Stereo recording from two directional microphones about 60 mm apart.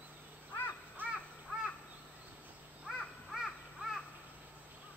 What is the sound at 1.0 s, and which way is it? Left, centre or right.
Crow, right.